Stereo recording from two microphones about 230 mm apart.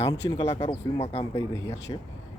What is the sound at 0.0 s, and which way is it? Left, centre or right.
Speech, centre.